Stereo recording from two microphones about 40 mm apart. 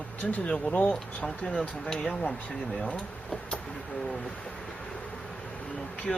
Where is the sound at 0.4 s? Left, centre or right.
Left.